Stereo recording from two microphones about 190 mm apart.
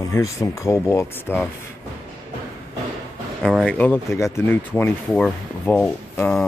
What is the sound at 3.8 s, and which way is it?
Speech, 10° left (ahead or behind).